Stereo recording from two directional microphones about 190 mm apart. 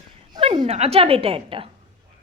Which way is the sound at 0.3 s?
30° right (ahead or behind).